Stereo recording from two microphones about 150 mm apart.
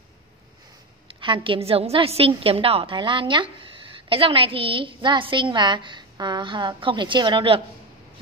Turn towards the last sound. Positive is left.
turn(degrees=-35)  # may be behind; listen again after turning